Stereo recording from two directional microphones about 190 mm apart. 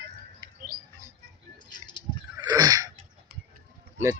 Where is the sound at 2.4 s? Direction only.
20° right (ahead or behind).